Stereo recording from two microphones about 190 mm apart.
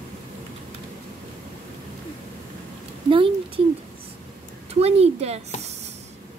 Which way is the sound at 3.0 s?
30° right (ahead or behind).